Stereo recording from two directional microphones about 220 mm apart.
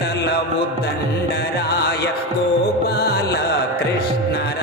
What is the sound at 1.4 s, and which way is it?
Music, 45° left (ahead or behind).